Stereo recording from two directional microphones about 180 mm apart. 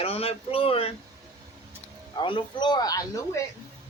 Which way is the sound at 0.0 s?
35° left (ahead or behind).